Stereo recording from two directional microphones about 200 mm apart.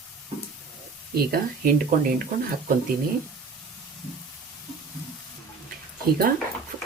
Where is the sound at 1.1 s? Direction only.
50° right (ahead or behind).